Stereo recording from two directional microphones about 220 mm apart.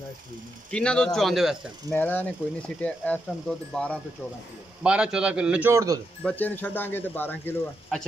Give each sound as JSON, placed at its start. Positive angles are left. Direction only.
{"t": 0.7, "sound": "speech", "side_deg": 5}
{"t": 1.9, "sound": "speech", "side_deg": 10}
{"t": 6.2, "sound": "speech", "side_deg": 10}